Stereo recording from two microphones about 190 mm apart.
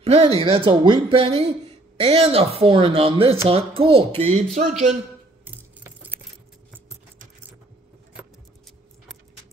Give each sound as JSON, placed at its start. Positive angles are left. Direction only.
{"t": 0.0, "sound": "speech", "side_deg": -30}
{"t": 5.4, "sound": "keys jangling", "side_deg": -10}